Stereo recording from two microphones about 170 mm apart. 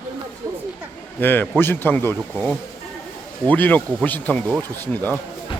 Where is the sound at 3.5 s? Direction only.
10° left (ahead or behind).